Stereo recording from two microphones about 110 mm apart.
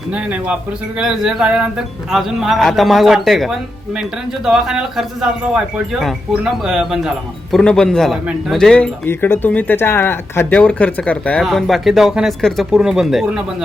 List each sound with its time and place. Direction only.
0.1 s speech: 10° right (ahead or behind)
7.5 s speech: 5° left (ahead or behind)
9.0 s speech: 20° left (ahead or behind)
10.6 s speech: 10° left (ahead or behind)
11.4 s speech: centre (ahead or behind)